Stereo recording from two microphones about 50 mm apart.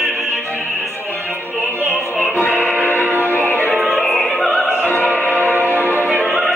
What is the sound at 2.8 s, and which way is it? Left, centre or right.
Music, left.